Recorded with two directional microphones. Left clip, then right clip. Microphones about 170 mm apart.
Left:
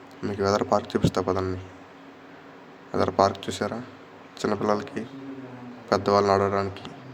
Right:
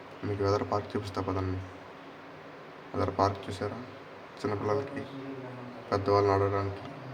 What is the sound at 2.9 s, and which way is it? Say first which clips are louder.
Speech: left 7 dB; 45° left (ahead or behind).